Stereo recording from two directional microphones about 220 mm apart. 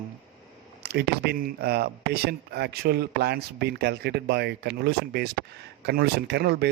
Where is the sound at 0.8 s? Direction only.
50° right (ahead or behind).